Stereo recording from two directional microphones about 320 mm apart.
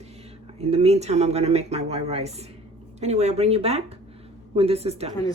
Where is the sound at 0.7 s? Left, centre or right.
Centre.